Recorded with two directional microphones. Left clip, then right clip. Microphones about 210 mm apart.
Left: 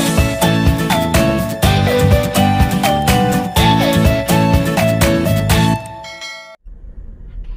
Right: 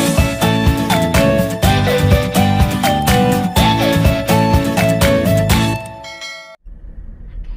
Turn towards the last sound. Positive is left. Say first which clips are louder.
# even
turn(degrees=0)  # may be behind; listen again after turning